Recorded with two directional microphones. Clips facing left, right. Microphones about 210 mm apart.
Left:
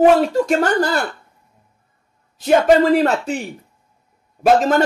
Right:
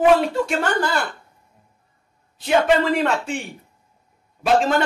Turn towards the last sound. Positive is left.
turn(degrees=45)  # may be behind; listen again after turning